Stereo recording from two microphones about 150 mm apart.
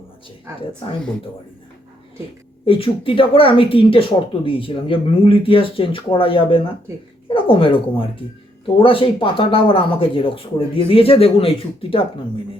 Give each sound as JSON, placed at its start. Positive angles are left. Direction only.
{"t": 0.5, "sound": "a woman's voice", "side_deg": -15}
{"t": 2.6, "sound": "speech", "side_deg": 40}